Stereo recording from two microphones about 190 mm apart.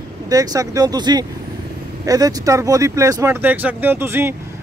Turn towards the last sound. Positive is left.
turn(degrees=-15)  # may be behind; listen again after turning